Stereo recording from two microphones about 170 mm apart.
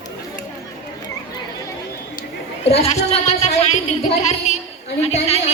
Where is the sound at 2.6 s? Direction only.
35° left (ahead or behind).